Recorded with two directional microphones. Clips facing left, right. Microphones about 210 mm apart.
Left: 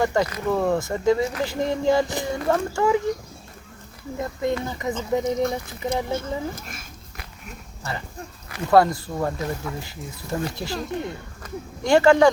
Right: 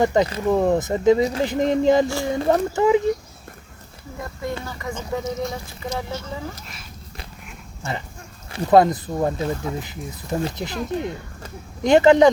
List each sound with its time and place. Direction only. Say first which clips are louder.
0.0 s speech: right 3 dB; 20° right (ahead or behind)
4.2 s speech: left 4 dB; 20° left (ahead or behind)
5.2 s speech: left 4 dB; 55° left (ahead or behind)
8.4 s speech: right 2 dB; 25° right (ahead or behind)